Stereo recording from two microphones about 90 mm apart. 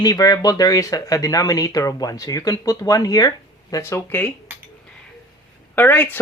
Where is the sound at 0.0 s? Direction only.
45° left (ahead or behind); by 4.3 s 30° left (ahead or behind).